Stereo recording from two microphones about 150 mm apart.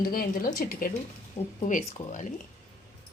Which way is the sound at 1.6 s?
55° left (ahead or behind).